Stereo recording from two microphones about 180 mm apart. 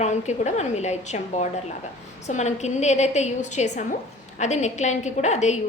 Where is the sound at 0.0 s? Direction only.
40° left (ahead or behind).